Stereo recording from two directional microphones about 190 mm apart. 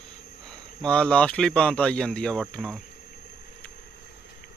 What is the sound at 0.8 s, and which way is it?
A man's voice, 5° left (ahead or behind).